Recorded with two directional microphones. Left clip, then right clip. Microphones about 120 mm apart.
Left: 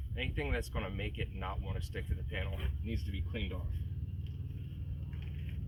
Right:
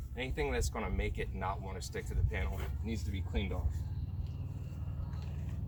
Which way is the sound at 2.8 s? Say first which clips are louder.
Right 3 dB; 25° right (ahead or behind).